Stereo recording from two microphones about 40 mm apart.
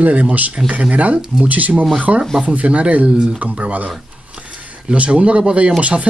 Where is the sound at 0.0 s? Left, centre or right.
Right.